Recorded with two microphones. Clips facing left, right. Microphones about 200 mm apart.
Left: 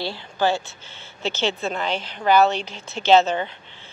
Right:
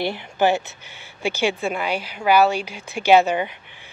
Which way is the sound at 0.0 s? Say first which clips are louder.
Right 3 dB; 15° right (ahead or behind).